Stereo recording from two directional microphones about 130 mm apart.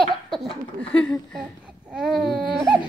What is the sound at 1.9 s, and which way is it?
Baby cry, centre (ahead or behind).